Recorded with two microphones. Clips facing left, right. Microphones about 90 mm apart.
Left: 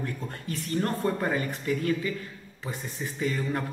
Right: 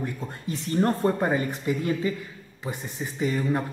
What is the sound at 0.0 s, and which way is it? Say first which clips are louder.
Speech: right 2 dB; 25° right (ahead or behind).